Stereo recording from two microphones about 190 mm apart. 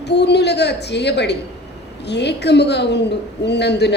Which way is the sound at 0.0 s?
65° left (ahead or behind).